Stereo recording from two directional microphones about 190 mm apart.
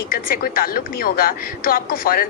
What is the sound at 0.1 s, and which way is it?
A woman's voice, 50° left (ahead or behind).